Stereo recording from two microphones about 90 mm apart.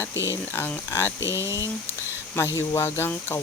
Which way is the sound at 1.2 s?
30° right (ahead or behind).